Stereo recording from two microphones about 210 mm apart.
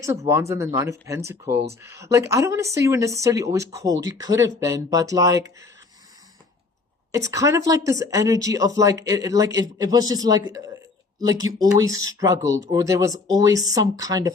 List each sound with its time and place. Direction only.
0.0 s speech: 15° right (ahead or behind)
7.3 s speech: 15° right (ahead or behind)